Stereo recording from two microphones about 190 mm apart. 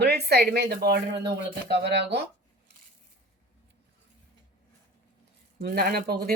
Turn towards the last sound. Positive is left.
turn(degrees=-55)  # may be behind; listen again after turning